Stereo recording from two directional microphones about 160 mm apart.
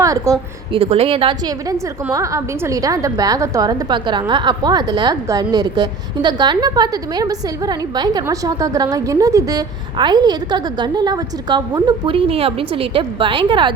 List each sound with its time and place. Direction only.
0.0 s a woman's voice: 20° right (ahead or behind)
0.7 s a woman's voice: 35° right (ahead or behind)